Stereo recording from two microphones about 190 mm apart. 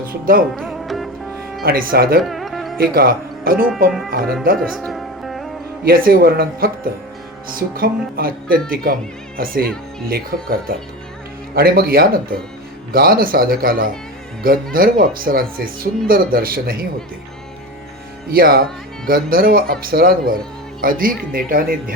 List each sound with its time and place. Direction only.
0.1 s speech: 50° right (ahead or behind)
0.5 s music: centre (ahead or behind)
1.6 s speech: 50° right (ahead or behind)
2.2 s music: centre (ahead or behind)
2.7 s speech: 50° right (ahead or behind)
4.7 s music: centre (ahead or behind)
5.8 s speech: 50° right (ahead or behind)
18.3 s speech: 50° right (ahead or behind)